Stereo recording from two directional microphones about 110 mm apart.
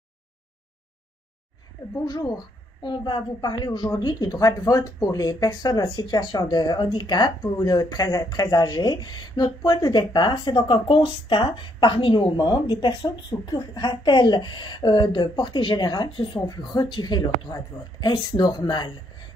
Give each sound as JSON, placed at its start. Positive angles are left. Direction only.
{"t": 2.0, "sound": "a woman's voice", "side_deg": 35}